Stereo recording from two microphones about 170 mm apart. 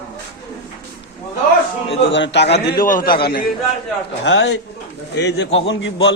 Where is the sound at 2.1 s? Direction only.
90° left; by 3.2 s 55° left (ahead or behind).